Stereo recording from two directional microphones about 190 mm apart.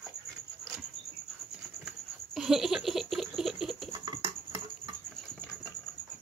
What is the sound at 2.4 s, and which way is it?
Laughter, centre (ahead or behind).